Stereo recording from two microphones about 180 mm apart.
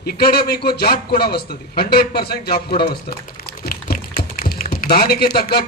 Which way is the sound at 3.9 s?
55° left (ahead or behind).